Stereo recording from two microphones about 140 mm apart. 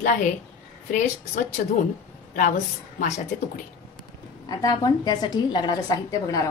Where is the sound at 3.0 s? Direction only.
55° left (ahead or behind).